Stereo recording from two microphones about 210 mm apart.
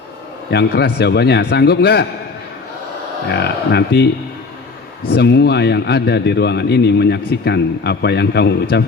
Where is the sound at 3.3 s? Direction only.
50° left (ahead or behind).